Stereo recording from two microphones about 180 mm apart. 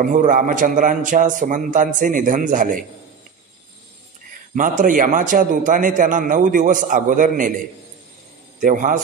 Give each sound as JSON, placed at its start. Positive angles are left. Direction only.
{"t": 0.0, "sound": "a man's voice", "side_deg": -45}
{"t": 4.6, "sound": "a man's voice", "side_deg": -45}